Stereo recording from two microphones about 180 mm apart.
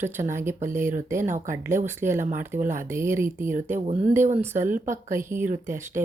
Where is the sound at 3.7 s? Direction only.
35° right (ahead or behind).